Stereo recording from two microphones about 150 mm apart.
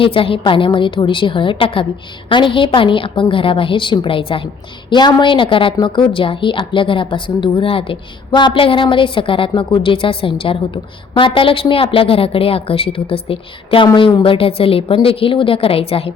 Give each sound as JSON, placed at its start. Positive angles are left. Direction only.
{"t": 0.0, "sound": "a woman's voice", "side_deg": 35}